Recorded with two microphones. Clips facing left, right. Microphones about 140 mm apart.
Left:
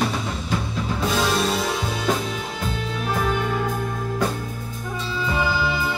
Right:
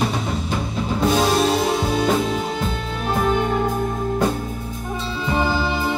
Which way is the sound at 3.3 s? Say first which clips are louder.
Right 4 dB; 30° right (ahead or behind).